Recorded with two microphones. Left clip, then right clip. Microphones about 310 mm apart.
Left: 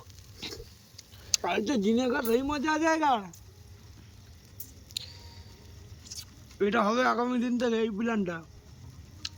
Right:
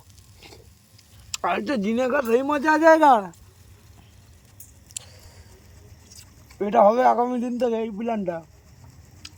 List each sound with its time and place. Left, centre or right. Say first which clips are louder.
1.4 s speech: right 7 dB; centre
4.9 s a sound: left 3 dB; centre
6.6 s speech: right 9 dB; centre